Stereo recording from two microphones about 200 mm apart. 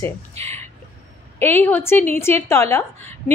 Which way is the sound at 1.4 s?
10° left (ahead or behind).